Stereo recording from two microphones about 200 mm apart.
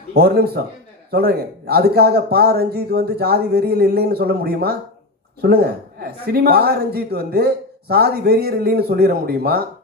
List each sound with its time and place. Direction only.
0.1 s a man's voice: 50° right (ahead or behind)